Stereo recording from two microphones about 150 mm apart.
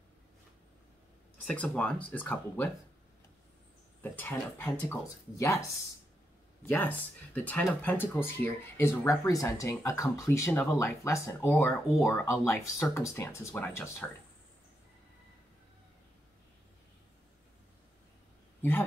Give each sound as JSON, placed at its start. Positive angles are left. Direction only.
{"t": 1.5, "sound": "speech", "side_deg": 10}
{"t": 4.0, "sound": "speech", "side_deg": 10}
{"t": 6.6, "sound": "speech", "side_deg": 10}
{"t": 18.6, "sound": "speech", "side_deg": 15}